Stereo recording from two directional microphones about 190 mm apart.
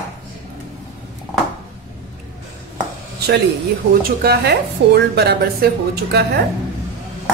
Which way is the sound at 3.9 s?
55° right (ahead or behind).